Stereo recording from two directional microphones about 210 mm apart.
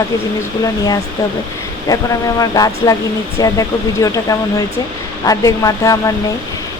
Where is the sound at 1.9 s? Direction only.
15° left (ahead or behind).